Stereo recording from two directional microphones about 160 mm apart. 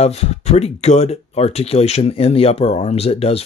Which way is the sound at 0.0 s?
40° left (ahead or behind).